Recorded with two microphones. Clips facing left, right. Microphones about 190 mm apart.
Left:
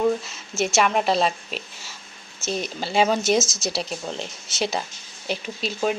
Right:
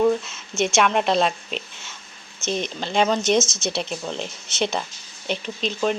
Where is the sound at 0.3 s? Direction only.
Centre (ahead or behind).